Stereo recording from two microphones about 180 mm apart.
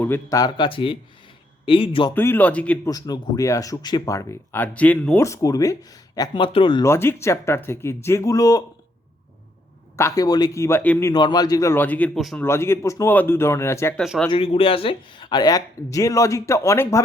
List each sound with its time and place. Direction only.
0.0 s speech: 15° left (ahead or behind)
2.1 s speech: 10° left (ahead or behind)
2.9 s speech: 20° left (ahead or behind)
5.2 s speech: 15° left (ahead or behind)
6.8 s speech: 15° left (ahead or behind)
10.0 s speech: 15° left (ahead or behind)
11.1 s speech: 25° left (ahead or behind); by 12.5 s centre (ahead or behind)
12.5 s speech: 15° left (ahead or behind)
14.0 s speech: centre (ahead or behind)
14.3 s speech: 30° left (ahead or behind); by 17.0 s 15° left (ahead or behind)